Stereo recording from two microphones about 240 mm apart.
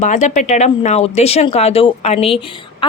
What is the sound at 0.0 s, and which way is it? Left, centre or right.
A woman's voice, left.